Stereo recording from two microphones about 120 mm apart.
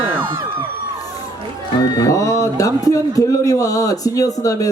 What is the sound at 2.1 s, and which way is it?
A man's voice, 30° left (ahead or behind).